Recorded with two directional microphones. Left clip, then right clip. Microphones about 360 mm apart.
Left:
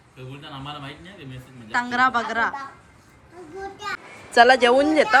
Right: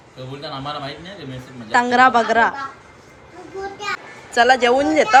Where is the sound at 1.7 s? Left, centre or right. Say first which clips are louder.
Right 7 dB; centre.